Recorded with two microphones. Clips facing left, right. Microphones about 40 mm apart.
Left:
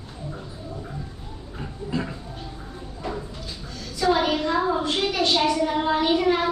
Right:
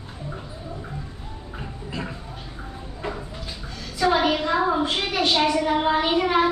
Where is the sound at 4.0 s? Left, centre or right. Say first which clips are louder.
Right 1 dB; right.